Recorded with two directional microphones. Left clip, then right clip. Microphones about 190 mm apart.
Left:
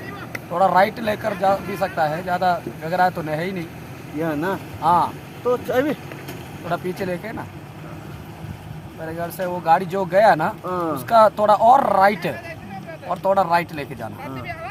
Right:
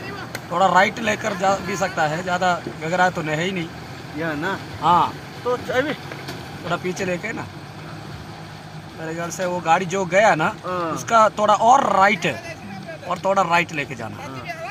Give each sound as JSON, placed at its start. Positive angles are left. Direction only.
{"t": 0.5, "sound": "speech", "side_deg": -5}
{"t": 4.2, "sound": "speech", "side_deg": 55}
{"t": 4.8, "sound": "speech", "side_deg": -5}
{"t": 5.5, "sound": "speech", "side_deg": 60}
{"t": 6.7, "sound": "speech", "side_deg": -5}
{"t": 9.1, "sound": "speech", "side_deg": -15}
{"t": 10.7, "sound": "speech", "side_deg": 50}
{"t": 11.1, "sound": "speech", "side_deg": -5}
{"t": 13.1, "sound": "speech", "side_deg": -5}